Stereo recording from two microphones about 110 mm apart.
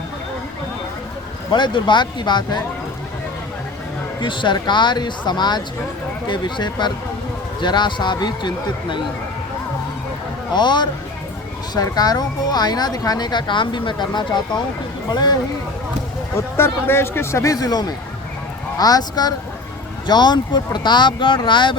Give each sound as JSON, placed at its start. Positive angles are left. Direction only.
{"t": 1.5, "sound": "speech", "side_deg": 45}
{"t": 4.2, "sound": "speech", "side_deg": 45}
{"t": 10.5, "sound": "speech", "side_deg": 45}
{"t": 16.3, "sound": "speech", "side_deg": 20}